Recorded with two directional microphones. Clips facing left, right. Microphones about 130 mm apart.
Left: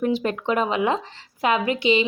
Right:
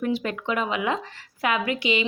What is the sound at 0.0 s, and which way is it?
A woman's voice, 30° left (ahead or behind).